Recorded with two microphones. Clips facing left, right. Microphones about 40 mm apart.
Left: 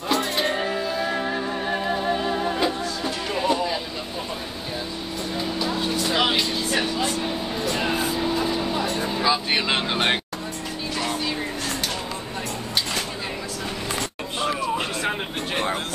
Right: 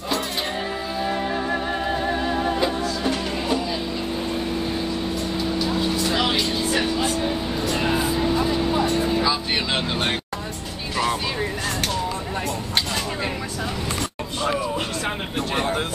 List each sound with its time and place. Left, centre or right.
5.6 s vehicle: centre
6.7 s vehicle: centre
9.2 s vehicle: centre